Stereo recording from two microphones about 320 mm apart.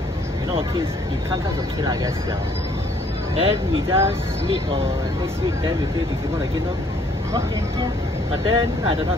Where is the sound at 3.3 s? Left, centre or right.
Centre.